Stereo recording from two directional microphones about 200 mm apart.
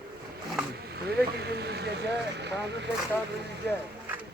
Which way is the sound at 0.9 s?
55° right (ahead or behind).